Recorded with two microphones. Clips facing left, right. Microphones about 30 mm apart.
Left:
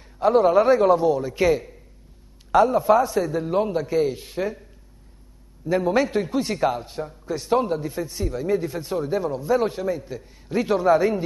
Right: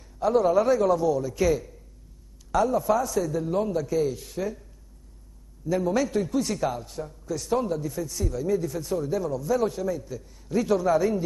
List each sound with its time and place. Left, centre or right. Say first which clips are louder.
0.0 s a man's voice: left 4 dB; left
5.7 s a man's voice: left 4 dB; left